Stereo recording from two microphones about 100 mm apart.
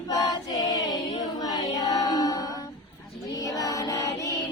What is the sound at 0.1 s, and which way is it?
Choir, 40° left (ahead or behind).